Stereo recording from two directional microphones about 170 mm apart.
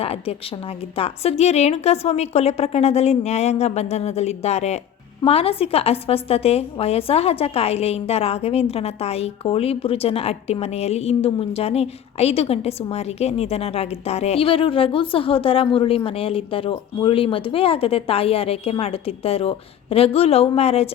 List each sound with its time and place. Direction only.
0.0 s a woman's voice: 35° left (ahead or behind)